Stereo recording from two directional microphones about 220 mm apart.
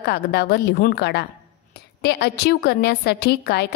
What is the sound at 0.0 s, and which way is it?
A woman's voice, 45° left (ahead or behind).